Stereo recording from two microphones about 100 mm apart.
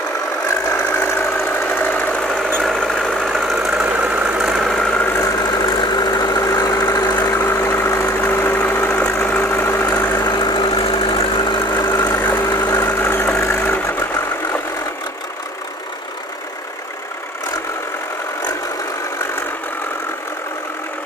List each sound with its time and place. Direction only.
0.7 s engine: 25° left (ahead or behind)
1.7 s engine knocking: 20° left (ahead or behind)
2.6 s engine: centre (ahead or behind)
5.2 s vehicle: 40° left (ahead or behind)
7.7 s engine: 25° left (ahead or behind)
10.0 s vehicle: 25° left (ahead or behind)
10.3 s engine: 55° left (ahead or behind)
11.9 s engine: 20° left (ahead or behind)
12.7 s vehicle: 20° left (ahead or behind)